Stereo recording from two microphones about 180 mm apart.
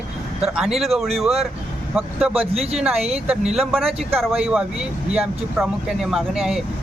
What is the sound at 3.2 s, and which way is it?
Speech, 5° right (ahead or behind).